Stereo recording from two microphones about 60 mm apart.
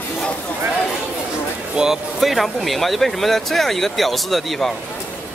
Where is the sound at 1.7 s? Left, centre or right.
Centre.